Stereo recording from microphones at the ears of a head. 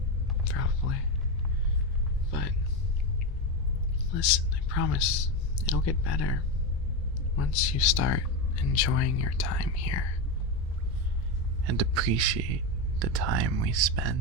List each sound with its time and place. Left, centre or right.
0.4 s a sound: left
4.1 s speech: left
11.6 s a man's voice: right